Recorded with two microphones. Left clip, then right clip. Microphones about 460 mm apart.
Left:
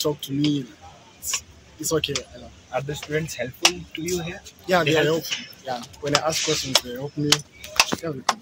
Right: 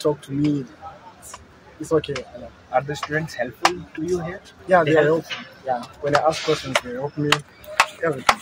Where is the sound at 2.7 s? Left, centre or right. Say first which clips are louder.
Right 4 dB; left.